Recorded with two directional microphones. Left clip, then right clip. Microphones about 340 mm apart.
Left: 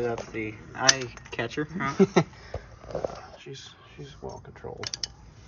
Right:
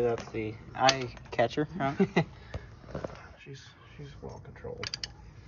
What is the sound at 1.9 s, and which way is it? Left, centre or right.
Speech, centre.